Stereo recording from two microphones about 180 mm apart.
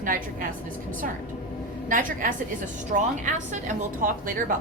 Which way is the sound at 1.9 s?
50° right (ahead or behind).